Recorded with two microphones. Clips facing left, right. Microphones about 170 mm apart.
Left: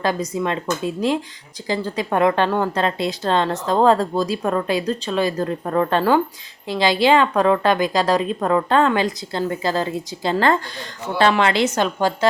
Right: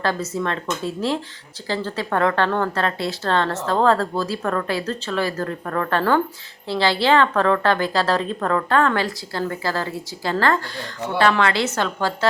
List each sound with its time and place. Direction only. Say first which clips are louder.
0.0 s speech: left 2 dB; 15° left (ahead or behind)